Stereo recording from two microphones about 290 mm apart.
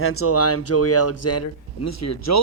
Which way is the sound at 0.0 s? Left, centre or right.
Left.